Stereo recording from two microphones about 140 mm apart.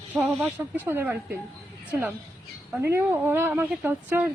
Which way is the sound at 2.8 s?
15° right (ahead or behind).